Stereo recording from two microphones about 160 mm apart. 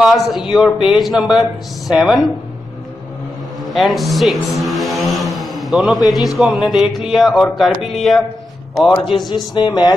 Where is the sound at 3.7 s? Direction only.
Centre (ahead or behind).